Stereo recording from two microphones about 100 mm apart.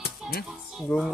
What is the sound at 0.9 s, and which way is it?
Speech, centre (ahead or behind).